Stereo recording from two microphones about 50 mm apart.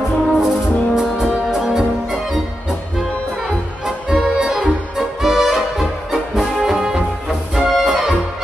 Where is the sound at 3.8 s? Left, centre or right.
Centre.